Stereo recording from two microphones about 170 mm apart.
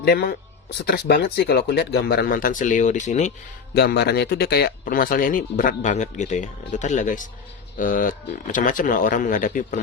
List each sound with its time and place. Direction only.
0.0 s speech: 65° left (ahead or behind); by 3.3 s 45° left (ahead or behind)
3.8 s speech: 70° left (ahead or behind); by 9.8 s 50° left (ahead or behind)